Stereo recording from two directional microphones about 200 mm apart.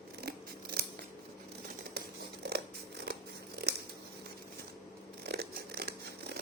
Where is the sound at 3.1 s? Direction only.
55° right (ahead or behind).